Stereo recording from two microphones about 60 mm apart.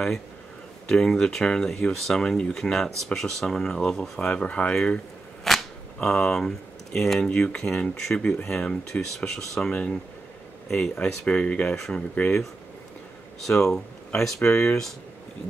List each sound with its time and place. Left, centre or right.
0.8 s speech: centre
4.4 s speech: left
5.4 s a sound: centre
5.9 s speech: centre
9.1 s speech: centre
13.5 s speech: centre